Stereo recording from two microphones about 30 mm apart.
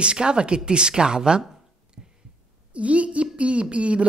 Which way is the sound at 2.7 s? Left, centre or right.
Right.